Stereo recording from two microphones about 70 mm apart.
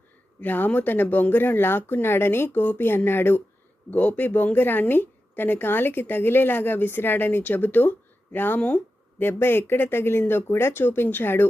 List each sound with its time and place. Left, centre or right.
0.3 s a woman's voice: left